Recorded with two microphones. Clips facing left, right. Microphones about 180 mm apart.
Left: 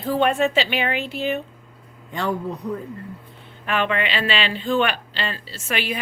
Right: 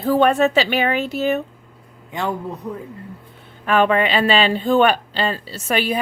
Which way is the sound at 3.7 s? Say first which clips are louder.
Right 6 dB; 40° right (ahead or behind).